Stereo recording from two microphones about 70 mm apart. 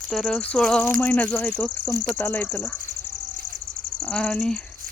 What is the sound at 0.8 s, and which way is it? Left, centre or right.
Speech, left.